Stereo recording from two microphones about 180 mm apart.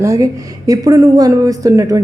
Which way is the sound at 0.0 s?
20° right (ahead or behind).